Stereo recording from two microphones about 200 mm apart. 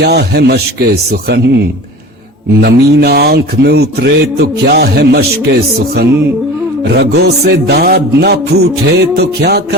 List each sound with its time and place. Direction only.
0.0 s music: 55° right (ahead or behind)
2.6 s music: 55° right (ahead or behind)